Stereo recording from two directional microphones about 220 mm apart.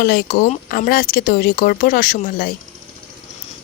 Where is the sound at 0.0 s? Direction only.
45° left (ahead or behind).